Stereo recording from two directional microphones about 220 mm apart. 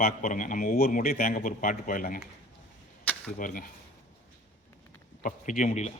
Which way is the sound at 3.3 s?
40° left (ahead or behind).